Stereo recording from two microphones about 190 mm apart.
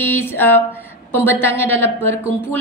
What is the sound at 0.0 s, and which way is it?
A woman's voice, 10° left (ahead or behind).